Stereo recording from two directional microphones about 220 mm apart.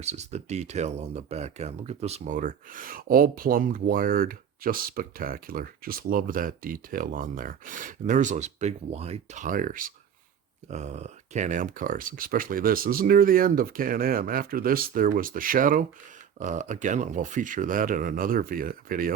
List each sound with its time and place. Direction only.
0.0 s speech: 30° right (ahead or behind)